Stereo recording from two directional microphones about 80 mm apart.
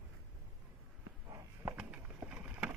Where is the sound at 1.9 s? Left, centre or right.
Centre.